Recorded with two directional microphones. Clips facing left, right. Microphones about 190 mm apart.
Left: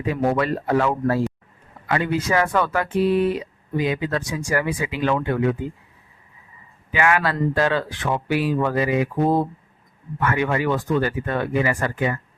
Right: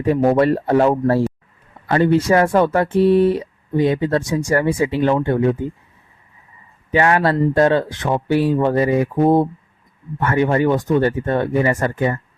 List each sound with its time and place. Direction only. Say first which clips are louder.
0.0 s speech: right 7 dB; 35° right (ahead or behind)
2.4 s speech: right 6 dB; 45° right (ahead or behind)
2.6 s speech: right 6 dB; 30° right (ahead or behind)
4.4 s speech: right 4 dB; 40° right (ahead or behind)
4.6 s speech: right 6 dB; 30° right (ahead or behind)
6.9 s speech: right 5 dB; 35° right (ahead or behind)
10.7 s speech: right 5 dB; 20° right (ahead or behind)